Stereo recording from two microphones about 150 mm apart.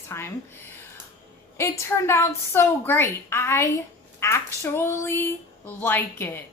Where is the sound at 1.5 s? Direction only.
20° left (ahead or behind).